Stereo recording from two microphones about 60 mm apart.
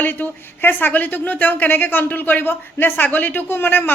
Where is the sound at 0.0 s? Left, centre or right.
Left.